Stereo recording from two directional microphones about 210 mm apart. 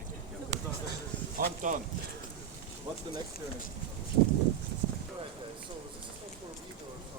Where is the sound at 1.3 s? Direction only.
40° right (ahead or behind).